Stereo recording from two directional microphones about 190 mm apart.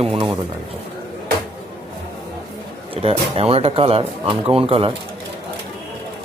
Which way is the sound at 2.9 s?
30° right (ahead or behind).